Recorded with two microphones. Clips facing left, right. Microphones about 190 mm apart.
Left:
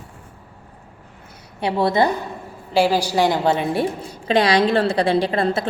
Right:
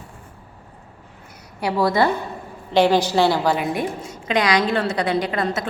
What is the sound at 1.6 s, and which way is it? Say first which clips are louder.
Speech: left 1 dB; 25° left (ahead or behind).